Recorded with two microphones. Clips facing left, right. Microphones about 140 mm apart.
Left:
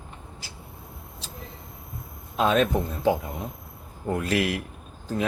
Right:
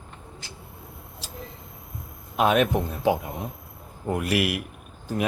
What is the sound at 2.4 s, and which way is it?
Speech, 15° right (ahead or behind).